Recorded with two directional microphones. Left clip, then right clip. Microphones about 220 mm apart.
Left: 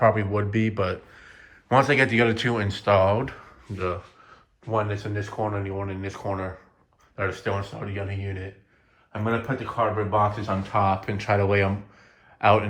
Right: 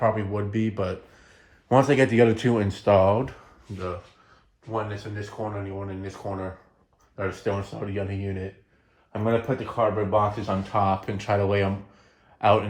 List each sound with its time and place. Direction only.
0.0 s speech: 15° right (ahead or behind); by 10.2 s 40° right (ahead or behind)
10.2 s a man's voice: 25° right (ahead or behind)